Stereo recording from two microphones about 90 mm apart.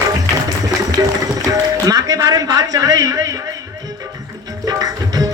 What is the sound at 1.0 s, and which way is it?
A man's voice, 35° right (ahead or behind).